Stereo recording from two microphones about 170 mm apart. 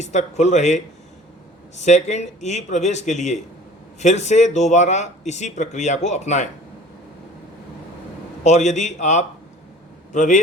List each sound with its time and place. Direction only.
0.0 s speech: 45° left (ahead or behind)
8.4 s a man's voice: 40° left (ahead or behind)